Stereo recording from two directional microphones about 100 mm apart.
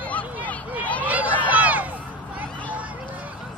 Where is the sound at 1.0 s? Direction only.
15° right (ahead or behind).